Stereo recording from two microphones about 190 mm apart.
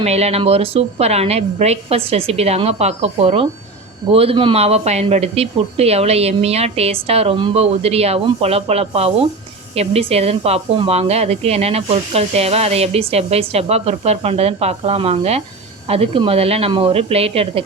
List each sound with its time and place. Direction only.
0.0 s speech: 35° right (ahead or behind)